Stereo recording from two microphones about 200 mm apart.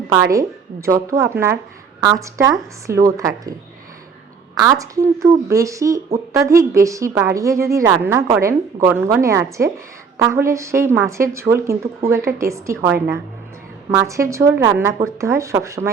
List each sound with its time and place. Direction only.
0.1 s a woman's voice: 15° right (ahead or behind)
4.5 s a woman's voice: 15° right (ahead or behind)